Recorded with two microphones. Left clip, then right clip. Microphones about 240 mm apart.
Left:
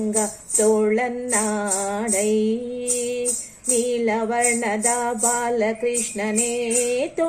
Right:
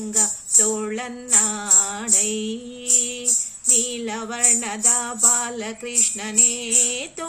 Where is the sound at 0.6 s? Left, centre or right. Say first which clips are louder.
Left 7 dB; centre.